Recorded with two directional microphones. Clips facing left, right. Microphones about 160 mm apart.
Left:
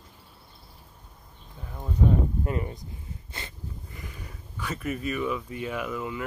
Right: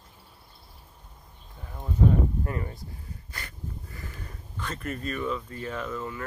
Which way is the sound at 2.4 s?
20° left (ahead or behind).